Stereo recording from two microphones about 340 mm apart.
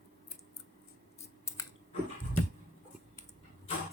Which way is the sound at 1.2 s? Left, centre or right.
Centre.